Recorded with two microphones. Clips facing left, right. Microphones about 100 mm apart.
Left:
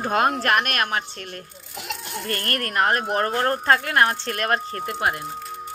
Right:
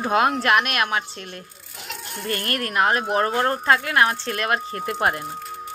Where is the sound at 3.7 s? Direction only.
40° left (ahead or behind).